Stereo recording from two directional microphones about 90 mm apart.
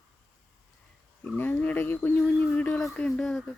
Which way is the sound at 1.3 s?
20° left (ahead or behind).